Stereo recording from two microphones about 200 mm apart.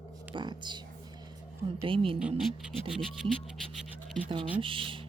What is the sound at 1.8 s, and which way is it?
Speech, 25° right (ahead or behind).